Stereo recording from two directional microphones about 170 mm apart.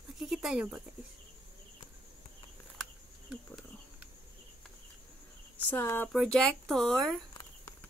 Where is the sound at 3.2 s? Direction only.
5° right (ahead or behind).